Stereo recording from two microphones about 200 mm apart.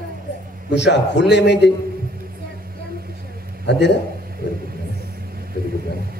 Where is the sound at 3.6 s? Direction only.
60° left (ahead or behind).